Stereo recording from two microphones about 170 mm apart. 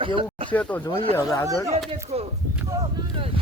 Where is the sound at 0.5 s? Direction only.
10° left (ahead or behind).